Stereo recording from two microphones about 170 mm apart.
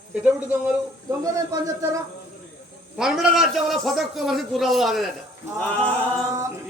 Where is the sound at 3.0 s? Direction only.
Centre (ahead or behind).